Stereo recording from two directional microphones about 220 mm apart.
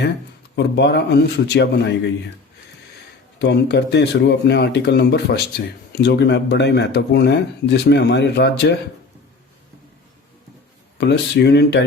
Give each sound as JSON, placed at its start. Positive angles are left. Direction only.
{"t": 0.5, "sound": "speech", "side_deg": 50}
{"t": 3.3, "sound": "speech", "side_deg": 50}
{"t": 10.9, "sound": "speech", "side_deg": 50}